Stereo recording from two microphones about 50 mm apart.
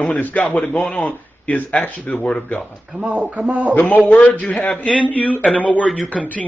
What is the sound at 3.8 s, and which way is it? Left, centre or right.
A man's voice, left.